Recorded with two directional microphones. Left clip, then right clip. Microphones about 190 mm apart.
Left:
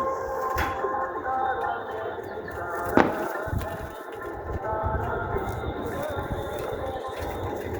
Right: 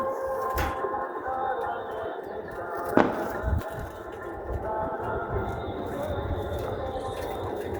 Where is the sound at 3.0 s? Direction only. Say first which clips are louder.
Left 1 dB; 35° left (ahead or behind).